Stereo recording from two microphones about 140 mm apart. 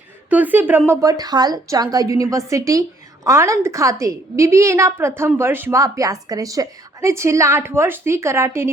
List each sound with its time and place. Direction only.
0.3 s a woman's voice: 10° right (ahead or behind)
0.9 s a woman's voice: 25° right (ahead or behind)